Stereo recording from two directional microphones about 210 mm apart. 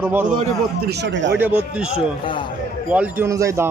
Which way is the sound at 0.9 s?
55° right (ahead or behind).